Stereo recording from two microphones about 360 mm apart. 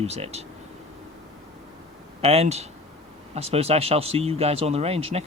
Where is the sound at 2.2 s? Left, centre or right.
Centre.